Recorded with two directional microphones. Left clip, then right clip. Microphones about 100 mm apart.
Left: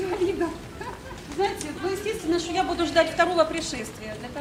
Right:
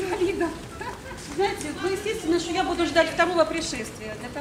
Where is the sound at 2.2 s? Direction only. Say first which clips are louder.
Even; 15° left (ahead or behind).